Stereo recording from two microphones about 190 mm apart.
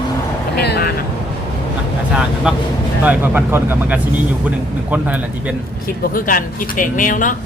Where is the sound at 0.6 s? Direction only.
60° left (ahead or behind).